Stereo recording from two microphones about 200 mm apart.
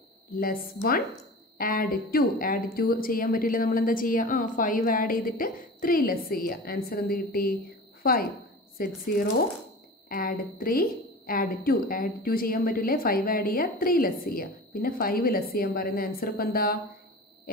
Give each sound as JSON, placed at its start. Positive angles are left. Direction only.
{"t": 0.4, "sound": "a woman's voice", "side_deg": 45}